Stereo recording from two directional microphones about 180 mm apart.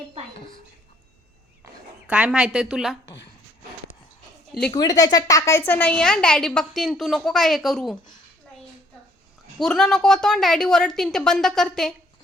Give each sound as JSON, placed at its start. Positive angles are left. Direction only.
{"t": 0.3, "sound": "a sound", "side_deg": 30}
{"t": 2.0, "sound": "a woman's voice", "side_deg": -5}
{"t": 4.7, "sound": "a woman's voice", "side_deg": 20}
{"t": 9.6, "sound": "a woman's voice", "side_deg": 0}